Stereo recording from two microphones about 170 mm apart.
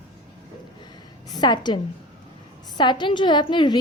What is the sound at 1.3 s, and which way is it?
Speech, 25° left (ahead or behind).